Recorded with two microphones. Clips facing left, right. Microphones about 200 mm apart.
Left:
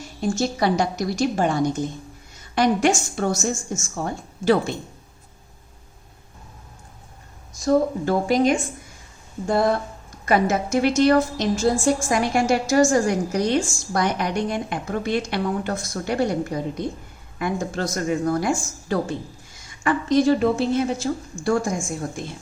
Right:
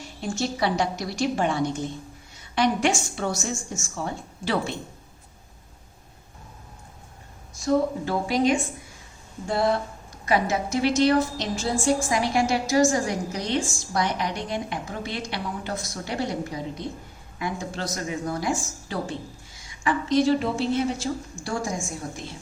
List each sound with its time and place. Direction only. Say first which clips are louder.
0.2 s a woman's voice: left 4 dB; 45° left (ahead or behind)
7.6 s a woman's voice: left 3 dB; 45° left (ahead or behind)